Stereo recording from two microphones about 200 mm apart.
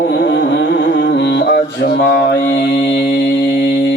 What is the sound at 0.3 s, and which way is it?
Music, 65° left (ahead or behind).